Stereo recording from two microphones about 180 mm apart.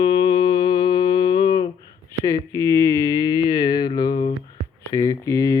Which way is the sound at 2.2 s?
15° left (ahead or behind).